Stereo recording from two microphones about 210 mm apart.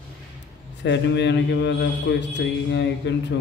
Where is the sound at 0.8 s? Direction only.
55° left (ahead or behind).